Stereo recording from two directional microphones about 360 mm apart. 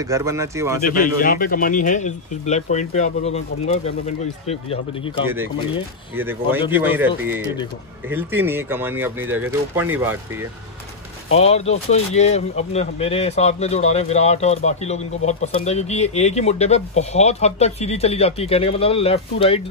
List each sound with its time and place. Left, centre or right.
0.0 s speech: centre
0.9 s speech: left
6.1 s speech: centre
8.1 s speech: centre
11.3 s speech: centre